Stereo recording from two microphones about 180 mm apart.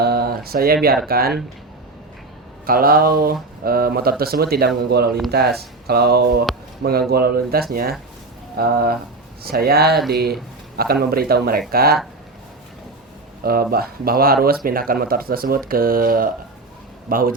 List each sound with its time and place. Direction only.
0.0 s a sound: 60° right (ahead or behind)
1.0 s speech: 55° right (ahead or behind)
2.6 s speech: 55° right (ahead or behind)
13.4 s speech: 55° right (ahead or behind)